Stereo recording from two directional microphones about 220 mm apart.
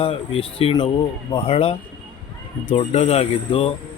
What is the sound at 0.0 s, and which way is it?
Speech, 25° left (ahead or behind).